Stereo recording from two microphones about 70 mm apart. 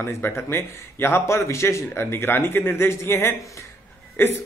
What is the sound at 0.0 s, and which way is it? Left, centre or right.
Speech, left.